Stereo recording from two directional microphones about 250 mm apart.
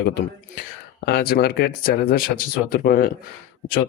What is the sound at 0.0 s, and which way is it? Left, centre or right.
Speech, left.